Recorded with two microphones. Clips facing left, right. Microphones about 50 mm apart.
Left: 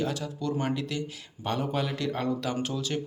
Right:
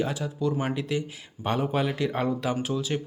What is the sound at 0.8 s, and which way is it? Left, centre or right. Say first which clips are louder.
A man's voice: right 4 dB; centre.